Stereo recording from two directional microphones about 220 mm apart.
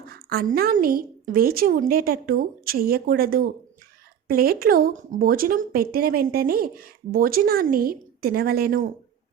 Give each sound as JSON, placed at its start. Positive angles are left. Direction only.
{"t": 0.1, "sound": "a woman's voice", "side_deg": -45}